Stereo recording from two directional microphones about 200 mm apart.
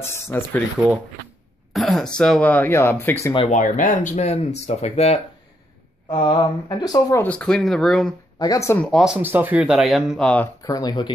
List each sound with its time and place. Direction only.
0.0 s speech: 10° left (ahead or behind)
1.7 s speech: centre (ahead or behind)
3.3 s speech: 35° left (ahead or behind); by 7.2 s 20° left (ahead or behind)
7.2 s speech: 5° left (ahead or behind)
8.4 s speech: 15° left (ahead or behind)
8.9 s speech: 5° right (ahead or behind)
10.6 s speech: 20° left (ahead or behind)